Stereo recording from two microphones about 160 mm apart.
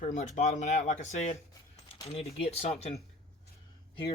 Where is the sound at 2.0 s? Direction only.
40° left (ahead or behind).